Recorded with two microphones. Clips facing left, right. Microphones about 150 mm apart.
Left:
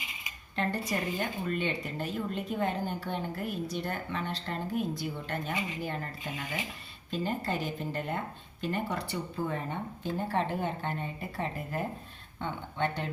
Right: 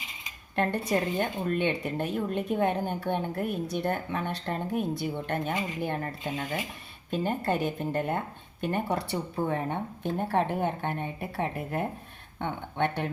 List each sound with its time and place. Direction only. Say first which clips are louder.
0.5 s speech: right 5 dB; 55° right (ahead or behind)
12.4 s speech: right 3 dB; 60° right (ahead or behind)